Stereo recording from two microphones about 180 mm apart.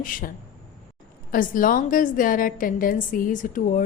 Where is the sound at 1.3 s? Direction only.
50° left (ahead or behind).